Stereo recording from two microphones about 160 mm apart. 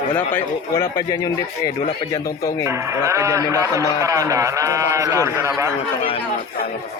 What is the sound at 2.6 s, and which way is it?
A man's voice, 15° right (ahead or behind).